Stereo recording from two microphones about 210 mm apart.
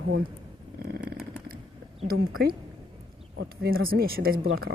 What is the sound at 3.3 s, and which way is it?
Speech, 45° right (ahead or behind).